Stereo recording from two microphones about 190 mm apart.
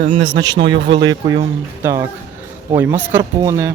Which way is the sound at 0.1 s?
25° right (ahead or behind).